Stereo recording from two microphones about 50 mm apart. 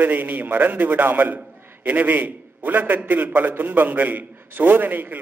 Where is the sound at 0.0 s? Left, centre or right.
Right.